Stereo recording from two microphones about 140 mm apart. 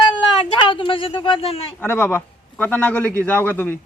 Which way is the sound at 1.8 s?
15° left (ahead or behind).